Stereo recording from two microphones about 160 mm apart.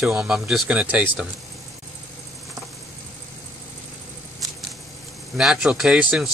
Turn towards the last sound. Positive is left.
turn(degrees=-5)  # may be behind; listen again after turning